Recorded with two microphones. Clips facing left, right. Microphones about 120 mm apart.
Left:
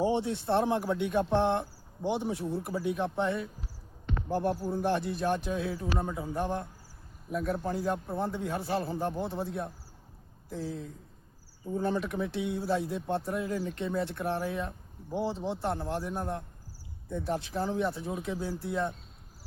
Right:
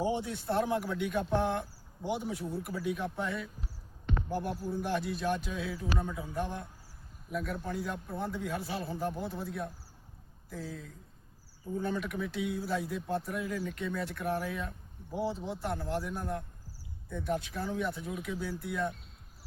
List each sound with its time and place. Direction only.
0.0 s speech: 25° left (ahead or behind)